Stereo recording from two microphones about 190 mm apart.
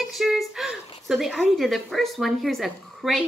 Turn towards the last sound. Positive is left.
turn(degrees=0)  # may be behind; listen again after turning